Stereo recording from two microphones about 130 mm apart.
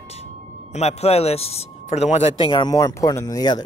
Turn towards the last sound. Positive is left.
turn(degrees=30)  # may be behind; listen again after turning